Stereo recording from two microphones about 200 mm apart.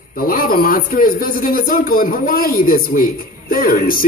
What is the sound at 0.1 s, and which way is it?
A man's voice, 45° left (ahead or behind).